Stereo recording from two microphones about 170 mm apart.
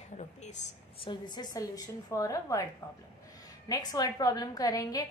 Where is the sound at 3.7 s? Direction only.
20° left (ahead or behind).